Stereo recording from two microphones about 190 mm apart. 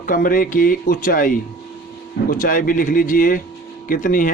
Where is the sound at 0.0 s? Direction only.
50° left (ahead or behind).